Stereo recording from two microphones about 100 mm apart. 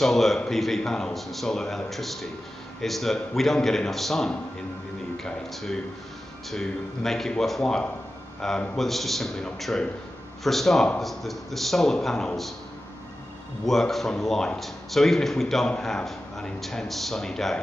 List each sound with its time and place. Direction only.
0.0 s a man's voice: centre (ahead or behind)
13.7 s a man's voice: centre (ahead or behind)